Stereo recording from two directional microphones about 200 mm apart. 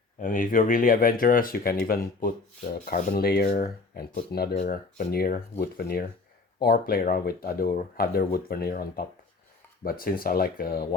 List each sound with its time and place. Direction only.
0.2 s rub: 45° left (ahead or behind)